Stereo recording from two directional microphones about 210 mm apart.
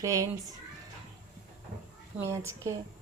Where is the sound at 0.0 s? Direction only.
15° right (ahead or behind).